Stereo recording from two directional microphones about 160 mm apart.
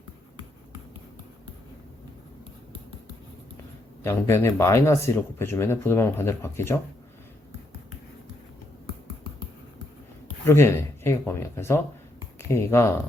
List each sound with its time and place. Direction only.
4.0 s speech: 15° left (ahead or behind)
10.4 s speech: 15° left (ahead or behind)